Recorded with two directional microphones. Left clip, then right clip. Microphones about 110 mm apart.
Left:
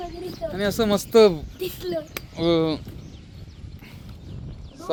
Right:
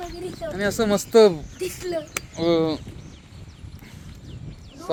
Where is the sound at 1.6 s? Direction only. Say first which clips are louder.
Right 1 dB; 45° left (ahead or behind).